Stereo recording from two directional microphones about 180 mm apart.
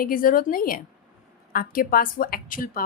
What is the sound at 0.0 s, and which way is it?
A woman's voice, 50° left (ahead or behind).